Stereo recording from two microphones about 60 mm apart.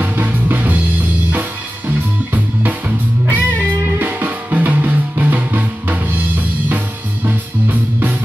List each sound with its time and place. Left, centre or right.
0.1 s music: right
1.9 s music: right
7.2 s music: right